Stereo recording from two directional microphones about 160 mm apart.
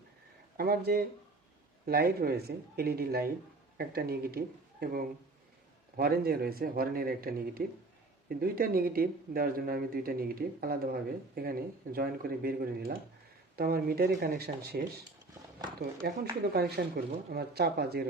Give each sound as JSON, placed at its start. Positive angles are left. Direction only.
{"t": 0.5, "sound": "speech", "side_deg": -75}
{"t": 15.8, "sound": "speech", "side_deg": -80}